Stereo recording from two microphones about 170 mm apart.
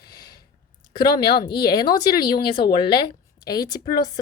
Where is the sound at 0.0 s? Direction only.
25° left (ahead or behind).